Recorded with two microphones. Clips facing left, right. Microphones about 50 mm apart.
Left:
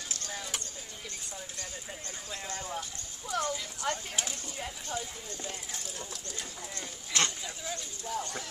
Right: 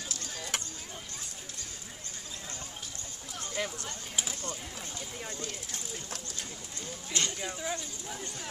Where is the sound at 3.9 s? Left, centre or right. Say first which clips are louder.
Left 10 dB; left.